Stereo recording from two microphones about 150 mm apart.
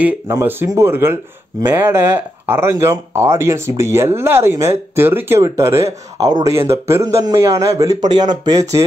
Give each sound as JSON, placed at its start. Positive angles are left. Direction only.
{"t": 0.0, "sound": "a man's voice", "side_deg": -15}